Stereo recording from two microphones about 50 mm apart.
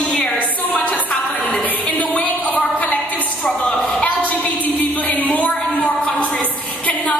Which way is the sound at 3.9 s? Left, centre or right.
Centre.